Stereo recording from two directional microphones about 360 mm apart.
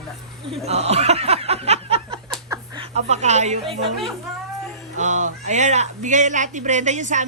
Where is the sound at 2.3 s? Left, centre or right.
Centre.